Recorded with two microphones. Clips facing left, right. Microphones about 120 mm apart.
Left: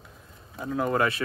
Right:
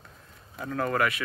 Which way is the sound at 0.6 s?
15° left (ahead or behind).